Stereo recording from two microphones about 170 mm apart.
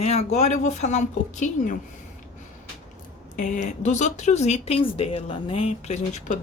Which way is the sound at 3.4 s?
45° left (ahead or behind).